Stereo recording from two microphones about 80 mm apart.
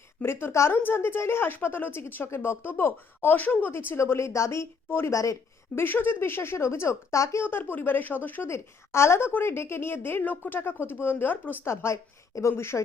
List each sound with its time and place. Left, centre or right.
0.2 s speech: left
5.1 s a woman's voice: left
5.7 s a woman's voice: left
7.4 s a woman's voice: left